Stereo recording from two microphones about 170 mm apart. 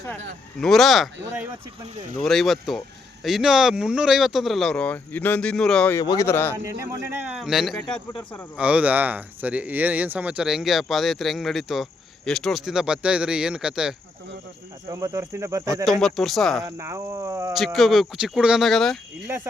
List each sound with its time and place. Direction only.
0.6 s speech: centre (ahead or behind)
6.0 s speech: 20° left (ahead or behind)
6.7 s speech: 15° right (ahead or behind)
14.8 s speech: 20° right (ahead or behind)
15.9 s speech: centre (ahead or behind)
16.6 s speech: 15° right (ahead or behind)
17.5 s speech: centre (ahead or behind)